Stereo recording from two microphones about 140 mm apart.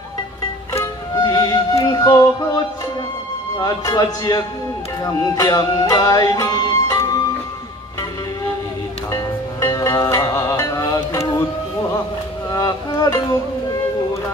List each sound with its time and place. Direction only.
0.7 s music: 25° left (ahead or behind)
3.5 s speech: 25° left (ahead or behind)
5.0 s music: 25° left (ahead or behind)
9.1 s music: 25° left (ahead or behind)
12.4 s music: 25° left (ahead or behind)